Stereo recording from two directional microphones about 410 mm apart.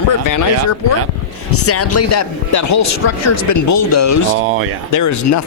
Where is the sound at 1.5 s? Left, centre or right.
Left.